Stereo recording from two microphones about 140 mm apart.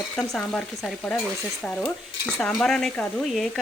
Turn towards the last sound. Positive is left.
turn(degrees=5)  # may be behind; listen again after turning